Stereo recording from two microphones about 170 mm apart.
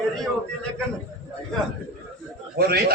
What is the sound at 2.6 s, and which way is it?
Speech, 65° right (ahead or behind).